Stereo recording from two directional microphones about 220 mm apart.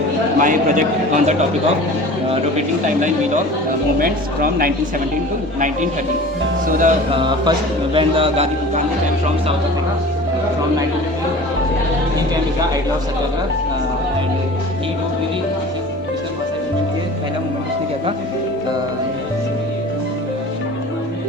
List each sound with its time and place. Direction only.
0.3 s a man's voice: 35° right (ahead or behind)
5.5 s a man's voice: 35° right (ahead or behind)
7.1 s a man's voice: 20° right (ahead or behind)